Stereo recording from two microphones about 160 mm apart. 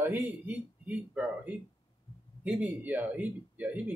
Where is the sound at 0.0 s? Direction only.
10° right (ahead or behind).